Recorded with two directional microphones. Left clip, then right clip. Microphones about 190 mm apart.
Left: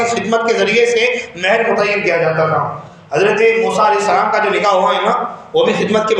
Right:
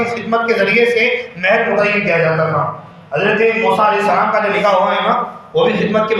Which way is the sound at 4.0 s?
45° left (ahead or behind).